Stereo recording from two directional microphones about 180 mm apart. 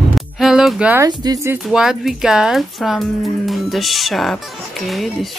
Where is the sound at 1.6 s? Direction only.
5° right (ahead or behind).